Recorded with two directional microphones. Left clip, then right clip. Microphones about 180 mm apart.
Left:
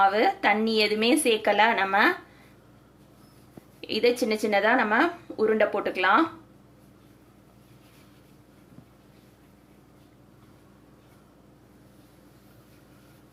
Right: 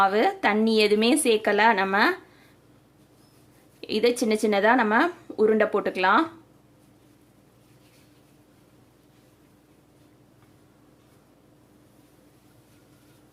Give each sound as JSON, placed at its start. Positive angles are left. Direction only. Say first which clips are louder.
{"t": 0.0, "sound": "speech", "louder": "even", "side_deg": -65}
{"t": 3.8, "sound": "speech", "louder": "even", "side_deg": -65}